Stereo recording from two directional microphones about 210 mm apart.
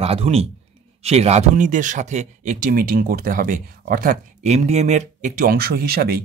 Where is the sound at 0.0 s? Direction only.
30° right (ahead or behind).